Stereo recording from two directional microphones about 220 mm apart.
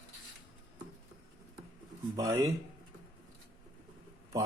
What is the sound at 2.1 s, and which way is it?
Speech, 15° right (ahead or behind).